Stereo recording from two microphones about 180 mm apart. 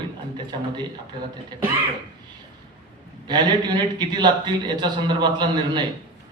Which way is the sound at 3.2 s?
25° right (ahead or behind).